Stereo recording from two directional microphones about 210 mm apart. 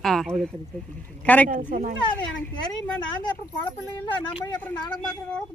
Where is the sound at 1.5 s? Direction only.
40° right (ahead or behind).